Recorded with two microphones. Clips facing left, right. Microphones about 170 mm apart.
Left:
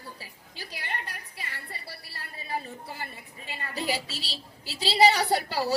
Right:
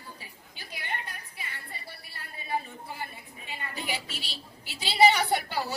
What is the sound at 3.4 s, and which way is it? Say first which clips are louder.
A woman's voice: left 5 dB; 35° left (ahead or behind).